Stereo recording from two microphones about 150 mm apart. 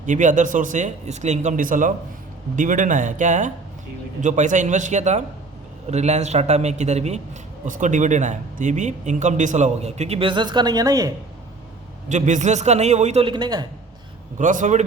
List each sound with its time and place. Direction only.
0.0 s speech: 55° right (ahead or behind); by 11.1 s 25° right (ahead or behind)
12.0 s speech: 55° right (ahead or behind)
13.2 s a man's voice: 30° right (ahead or behind)
14.3 s speech: 55° right (ahead or behind)